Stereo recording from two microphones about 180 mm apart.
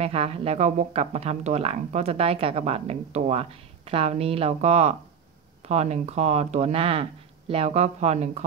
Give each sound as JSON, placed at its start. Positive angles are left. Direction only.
{"t": 0.0, "sound": "speech", "side_deg": -35}